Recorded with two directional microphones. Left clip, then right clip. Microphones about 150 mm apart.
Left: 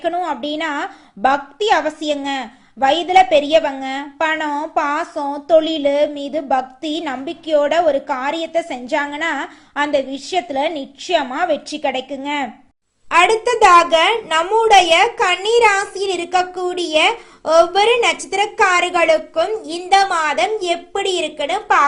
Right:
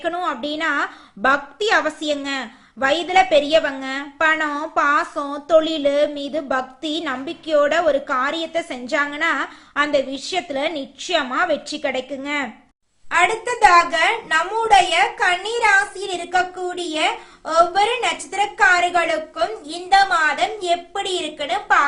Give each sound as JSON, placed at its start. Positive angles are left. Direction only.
{"t": 0.0, "sound": "a woman's voice", "side_deg": 5}
{"t": 13.1, "sound": "a woman's voice", "side_deg": 35}